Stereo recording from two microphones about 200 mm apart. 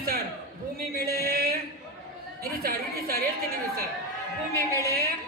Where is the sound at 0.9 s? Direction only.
50° right (ahead or behind).